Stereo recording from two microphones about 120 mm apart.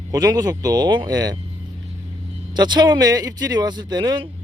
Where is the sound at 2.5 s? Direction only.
35° right (ahead or behind).